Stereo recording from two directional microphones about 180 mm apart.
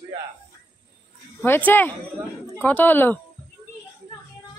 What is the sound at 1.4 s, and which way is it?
Speech, 10° left (ahead or behind).